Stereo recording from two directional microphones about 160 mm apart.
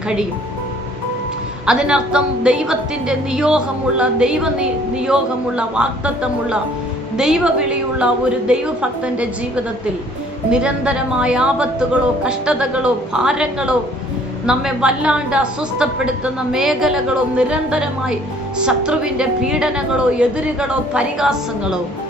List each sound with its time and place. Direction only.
1.6 s a woman's voice: 5° right (ahead or behind)
7.2 s a woman's voice: 5° right (ahead or behind)
10.5 s a woman's voice: 5° right (ahead or behind)